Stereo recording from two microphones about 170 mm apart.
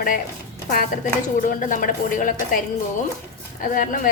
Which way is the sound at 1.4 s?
50° left (ahead or behind).